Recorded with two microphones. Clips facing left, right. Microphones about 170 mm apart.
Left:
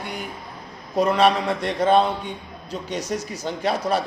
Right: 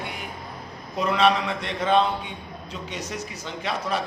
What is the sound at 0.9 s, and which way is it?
A man's voice, 45° left (ahead or behind).